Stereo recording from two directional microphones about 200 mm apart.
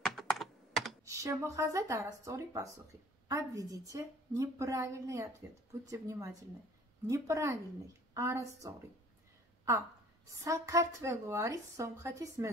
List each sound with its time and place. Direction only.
0.0 s computer keyboard: centre (ahead or behind)
1.0 s a woman's voice: 15° right (ahead or behind)
10.3 s a woman's voice: 15° right (ahead or behind)